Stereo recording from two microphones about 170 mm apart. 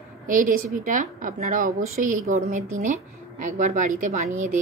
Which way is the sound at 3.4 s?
45° right (ahead or behind).